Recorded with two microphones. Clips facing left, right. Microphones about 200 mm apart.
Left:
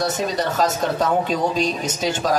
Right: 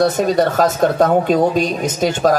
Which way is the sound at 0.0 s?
55° right (ahead or behind).